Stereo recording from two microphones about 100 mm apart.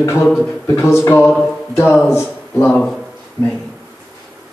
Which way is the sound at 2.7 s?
10° left (ahead or behind).